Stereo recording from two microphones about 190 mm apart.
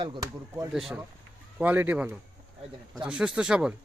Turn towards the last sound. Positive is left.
turn(degrees=-5)  # may be behind; listen again after turning